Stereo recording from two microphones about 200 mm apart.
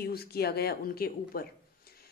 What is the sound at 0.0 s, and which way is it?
A woman's voice, 50° left (ahead or behind).